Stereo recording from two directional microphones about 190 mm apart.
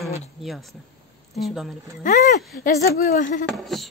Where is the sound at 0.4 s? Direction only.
Centre (ahead or behind).